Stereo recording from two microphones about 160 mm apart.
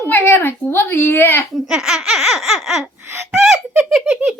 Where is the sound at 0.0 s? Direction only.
15° left (ahead or behind).